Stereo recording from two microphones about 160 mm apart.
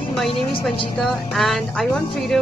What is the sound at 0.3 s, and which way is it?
Speech, 35° left (ahead or behind).